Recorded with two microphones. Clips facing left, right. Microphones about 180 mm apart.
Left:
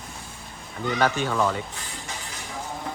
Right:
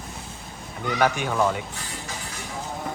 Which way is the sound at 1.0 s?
10° right (ahead or behind).